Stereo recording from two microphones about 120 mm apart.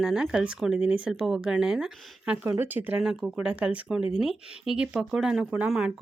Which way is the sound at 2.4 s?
15° right (ahead or behind).